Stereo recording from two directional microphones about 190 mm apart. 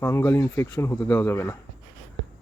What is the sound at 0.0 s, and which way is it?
Speech, 15° left (ahead or behind).